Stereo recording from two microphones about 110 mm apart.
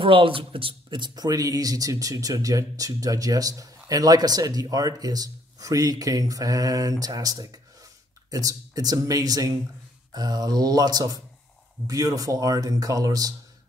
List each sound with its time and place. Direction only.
0.0 s speech: 55° right (ahead or behind); by 13.3 s 35° right (ahead or behind)